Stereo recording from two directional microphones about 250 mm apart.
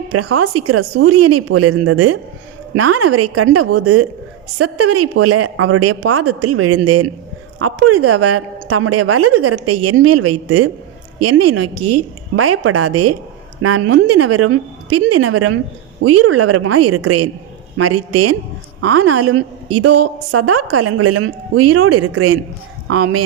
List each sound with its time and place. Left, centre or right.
0.1 s a woman's voice: right
18.8 s speech: right